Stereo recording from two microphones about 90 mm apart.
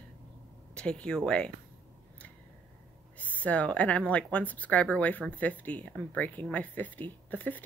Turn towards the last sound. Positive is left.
turn(degrees=20)  # may be behind; listen again after turning